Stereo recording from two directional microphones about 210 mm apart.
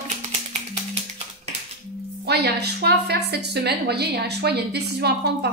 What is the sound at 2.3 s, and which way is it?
A woman's voice, 50° right (ahead or behind).